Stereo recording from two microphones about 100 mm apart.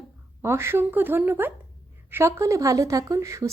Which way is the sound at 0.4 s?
25° right (ahead or behind).